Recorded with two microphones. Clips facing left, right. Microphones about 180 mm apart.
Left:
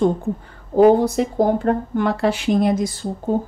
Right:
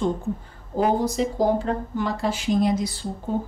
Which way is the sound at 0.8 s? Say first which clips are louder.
Left 8 dB; 65° left (ahead or behind).